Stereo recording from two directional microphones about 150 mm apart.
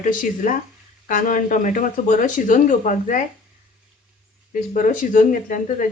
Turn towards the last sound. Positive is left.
turn(degrees=60)  # may be behind; listen again after turning